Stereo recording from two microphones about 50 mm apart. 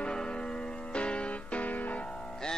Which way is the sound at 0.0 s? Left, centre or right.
Centre.